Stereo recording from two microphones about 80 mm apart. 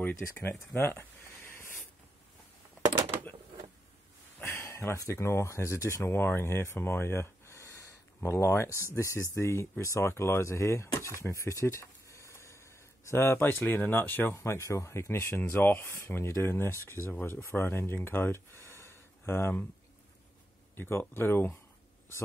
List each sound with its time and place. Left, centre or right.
0.0 s speech: left
1.5 s spray: left
4.4 s speech: left
14.4 s speech: left
20.7 s speech: left